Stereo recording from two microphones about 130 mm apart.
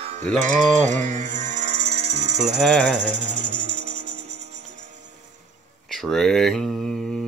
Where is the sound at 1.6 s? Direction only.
55° right (ahead or behind).